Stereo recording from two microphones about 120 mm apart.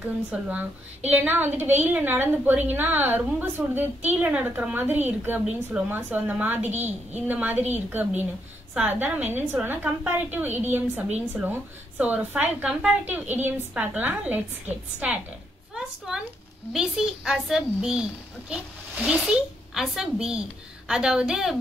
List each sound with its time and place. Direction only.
0.0 s a woman's voice: 10° right (ahead or behind)
16.1 s a woman's voice: 5° right (ahead or behind)